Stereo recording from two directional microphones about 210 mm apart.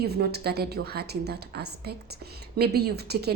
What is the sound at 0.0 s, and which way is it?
A woman's voice, 50° right (ahead or behind).